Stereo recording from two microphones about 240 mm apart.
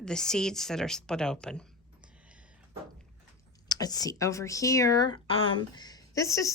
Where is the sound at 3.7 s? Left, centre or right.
Centre.